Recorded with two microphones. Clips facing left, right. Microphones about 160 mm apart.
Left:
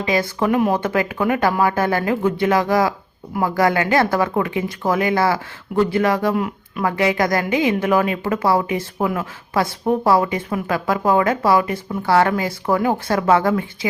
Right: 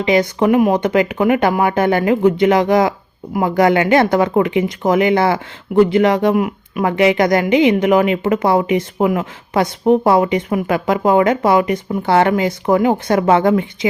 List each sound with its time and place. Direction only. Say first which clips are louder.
0.0 s a woman's voice: right 5 dB; 20° right (ahead or behind)
6.3 s a woman's voice: right 5 dB; 10° right (ahead or behind)